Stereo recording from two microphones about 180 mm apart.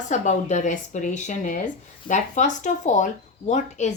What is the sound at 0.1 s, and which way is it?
Speech, 40° left (ahead or behind).